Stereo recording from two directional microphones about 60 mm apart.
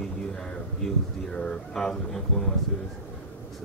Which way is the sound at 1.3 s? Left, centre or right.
Centre.